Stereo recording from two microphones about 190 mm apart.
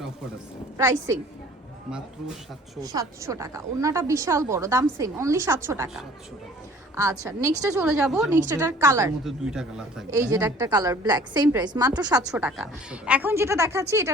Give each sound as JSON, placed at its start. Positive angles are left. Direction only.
{"t": 0.8, "sound": "a woman's voice", "side_deg": -15}
{"t": 2.8, "sound": "a woman's voice", "side_deg": -20}
{"t": 6.9, "sound": "a woman's voice", "side_deg": -15}
{"t": 7.8, "sound": "speech", "side_deg": -5}
{"t": 8.4, "sound": "a woman's voice", "side_deg": -15}
{"t": 9.2, "sound": "speech", "side_deg": -5}
{"t": 10.1, "sound": "a woman's voice", "side_deg": -20}
{"t": 12.3, "sound": "a woman's voice", "side_deg": -5}